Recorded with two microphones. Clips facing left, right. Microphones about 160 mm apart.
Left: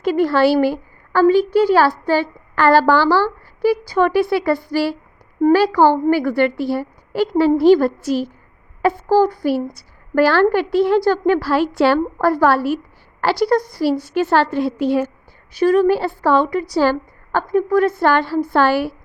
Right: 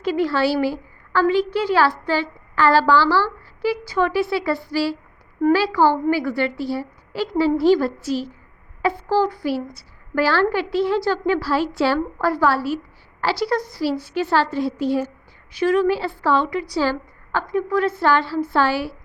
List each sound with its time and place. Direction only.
0.0 s a woman's voice: 50° left (ahead or behind)
13.5 s a woman's voice: 40° left (ahead or behind); by 15.1 s 60° left (ahead or behind)
15.6 s a woman's voice: 45° left (ahead or behind)